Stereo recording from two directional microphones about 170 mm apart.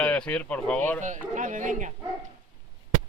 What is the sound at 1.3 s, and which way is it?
Speech, 50° right (ahead or behind).